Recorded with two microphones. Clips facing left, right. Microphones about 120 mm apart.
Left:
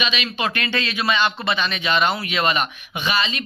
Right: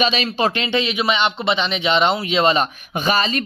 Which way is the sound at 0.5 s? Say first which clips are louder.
Right 4 dB; 20° right (ahead or behind).